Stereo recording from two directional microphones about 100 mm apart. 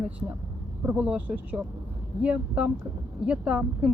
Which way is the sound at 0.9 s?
15° right (ahead or behind).